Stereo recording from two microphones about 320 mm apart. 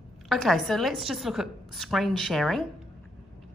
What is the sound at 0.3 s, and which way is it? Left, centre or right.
A woman's voice, centre.